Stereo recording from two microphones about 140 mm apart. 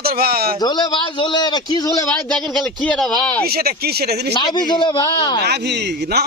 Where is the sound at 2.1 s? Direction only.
5° left (ahead or behind).